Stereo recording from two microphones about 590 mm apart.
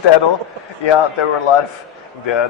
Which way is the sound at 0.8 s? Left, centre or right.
Left.